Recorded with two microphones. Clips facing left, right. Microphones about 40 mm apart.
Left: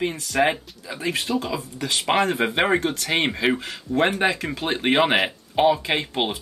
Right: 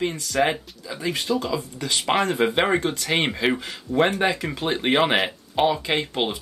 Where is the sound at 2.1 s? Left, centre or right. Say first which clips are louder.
Even; centre.